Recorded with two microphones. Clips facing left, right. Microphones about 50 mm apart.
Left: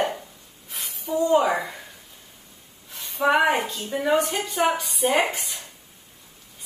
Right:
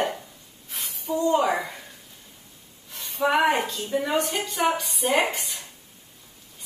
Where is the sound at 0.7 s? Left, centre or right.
Centre.